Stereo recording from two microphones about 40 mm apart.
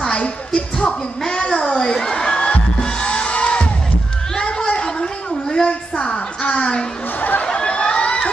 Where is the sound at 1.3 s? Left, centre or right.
Centre.